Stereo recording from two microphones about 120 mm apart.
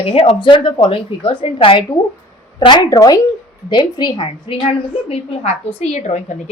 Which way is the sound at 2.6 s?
35° left (ahead or behind).